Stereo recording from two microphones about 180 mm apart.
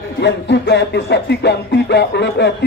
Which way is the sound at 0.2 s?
75° left (ahead or behind).